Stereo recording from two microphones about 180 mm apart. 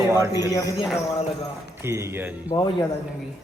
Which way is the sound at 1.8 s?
15° right (ahead or behind).